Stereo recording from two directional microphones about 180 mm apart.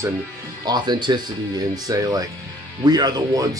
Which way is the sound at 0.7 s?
25° right (ahead or behind).